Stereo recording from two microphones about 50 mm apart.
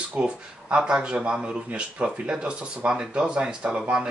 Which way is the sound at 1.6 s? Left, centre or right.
Right.